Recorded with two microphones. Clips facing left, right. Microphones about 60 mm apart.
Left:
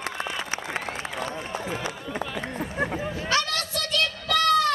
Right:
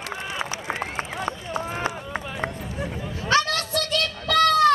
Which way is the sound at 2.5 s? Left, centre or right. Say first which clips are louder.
Left 4 dB; left.